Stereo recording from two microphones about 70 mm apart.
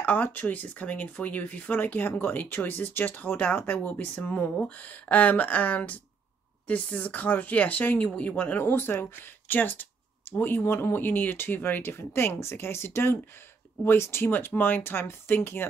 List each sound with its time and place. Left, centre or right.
0.0 s speech: left